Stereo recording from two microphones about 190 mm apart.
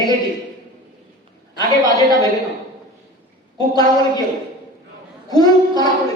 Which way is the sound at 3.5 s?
20° left (ahead or behind).